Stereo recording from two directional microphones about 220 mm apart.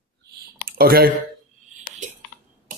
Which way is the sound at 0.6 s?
40° right (ahead or behind).